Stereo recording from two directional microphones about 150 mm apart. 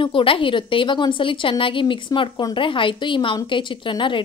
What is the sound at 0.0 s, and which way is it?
A woman's voice, 35° left (ahead or behind).